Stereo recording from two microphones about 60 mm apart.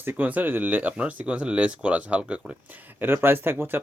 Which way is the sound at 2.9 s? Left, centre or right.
Right.